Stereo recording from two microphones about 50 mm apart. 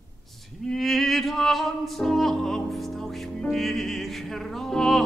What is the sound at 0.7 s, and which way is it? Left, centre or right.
Music, centre.